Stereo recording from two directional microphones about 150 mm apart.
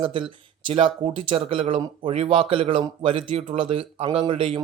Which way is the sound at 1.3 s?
35° right (ahead or behind).